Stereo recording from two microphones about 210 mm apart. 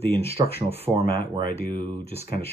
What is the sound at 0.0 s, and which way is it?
Speech, 30° right (ahead or behind).